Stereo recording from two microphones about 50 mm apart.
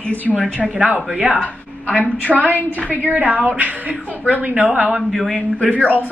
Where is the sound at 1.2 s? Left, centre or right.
Right.